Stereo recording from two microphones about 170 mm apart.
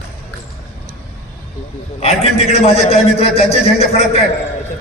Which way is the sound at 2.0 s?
35° left (ahead or behind).